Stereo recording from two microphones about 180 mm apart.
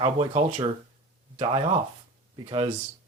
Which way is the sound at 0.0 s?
30° right (ahead or behind).